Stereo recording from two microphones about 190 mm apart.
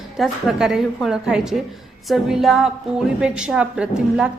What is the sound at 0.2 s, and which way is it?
A woman's voice, centre (ahead or behind).